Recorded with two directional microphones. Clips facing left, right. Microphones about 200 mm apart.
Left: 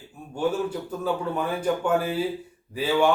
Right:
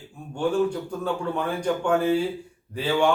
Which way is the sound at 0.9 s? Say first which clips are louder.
Even; 5° left (ahead or behind).